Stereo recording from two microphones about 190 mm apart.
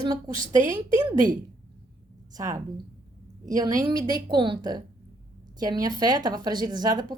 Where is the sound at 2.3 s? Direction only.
20° right (ahead or behind).